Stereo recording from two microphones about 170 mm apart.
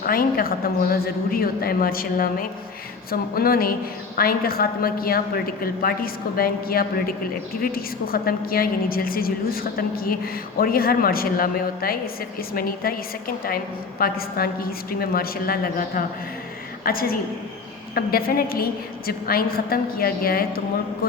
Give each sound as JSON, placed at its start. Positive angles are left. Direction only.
{"t": 0.0, "sound": "a woman's voice", "side_deg": 60}